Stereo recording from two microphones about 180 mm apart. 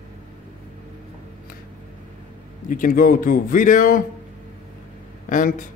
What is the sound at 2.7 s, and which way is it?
A man's voice, 50° left (ahead or behind).